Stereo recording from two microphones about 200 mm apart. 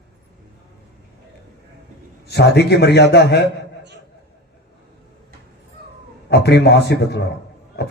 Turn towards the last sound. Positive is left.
turn(degrees=55)  # may be behind; listen again after turning